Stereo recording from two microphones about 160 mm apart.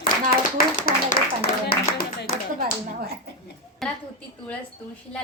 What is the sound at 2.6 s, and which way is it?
Speech, 70° right (ahead or behind).